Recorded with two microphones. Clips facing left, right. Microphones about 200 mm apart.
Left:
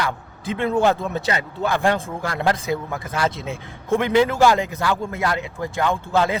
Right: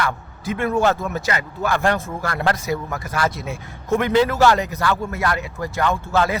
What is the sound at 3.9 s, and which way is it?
Speech, 15° left (ahead or behind).